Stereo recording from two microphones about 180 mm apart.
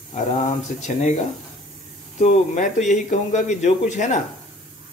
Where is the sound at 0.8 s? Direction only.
40° left (ahead or behind).